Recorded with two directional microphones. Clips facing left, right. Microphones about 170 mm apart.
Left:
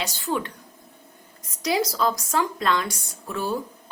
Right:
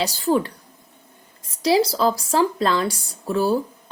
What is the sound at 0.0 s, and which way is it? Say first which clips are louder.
Speech: right 7 dB; 35° right (ahead or behind).